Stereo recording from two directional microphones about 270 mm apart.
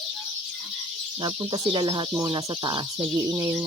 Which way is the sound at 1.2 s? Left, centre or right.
Centre.